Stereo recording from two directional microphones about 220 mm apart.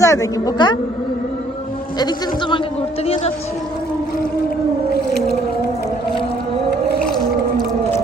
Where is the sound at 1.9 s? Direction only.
20° left (ahead or behind).